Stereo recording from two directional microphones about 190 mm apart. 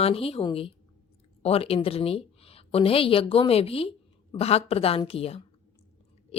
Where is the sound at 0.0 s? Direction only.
30° left (ahead or behind).